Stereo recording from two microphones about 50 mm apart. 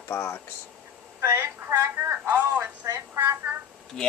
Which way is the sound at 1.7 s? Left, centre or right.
Right.